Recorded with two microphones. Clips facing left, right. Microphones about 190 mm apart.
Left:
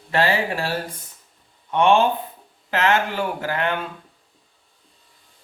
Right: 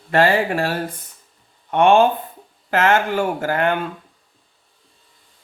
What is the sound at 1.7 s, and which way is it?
Speech, 50° right (ahead or behind).